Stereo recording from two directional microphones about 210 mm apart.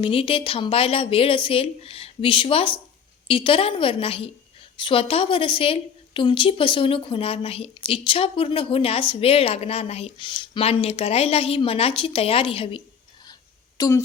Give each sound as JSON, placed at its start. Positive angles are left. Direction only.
{"t": 0.0, "sound": "a woman's voice", "side_deg": 25}
{"t": 13.7, "sound": "speech", "side_deg": 15}